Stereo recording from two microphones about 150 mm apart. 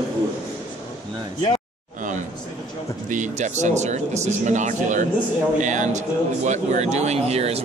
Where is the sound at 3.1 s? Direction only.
55° right (ahead or behind).